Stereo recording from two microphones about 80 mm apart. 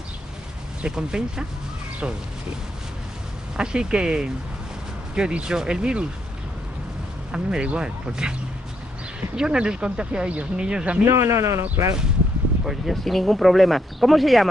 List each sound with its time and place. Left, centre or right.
0.8 s speech: centre
3.5 s speech: centre
7.3 s speech: centre
11.1 s speech: right
12.6 s speech: centre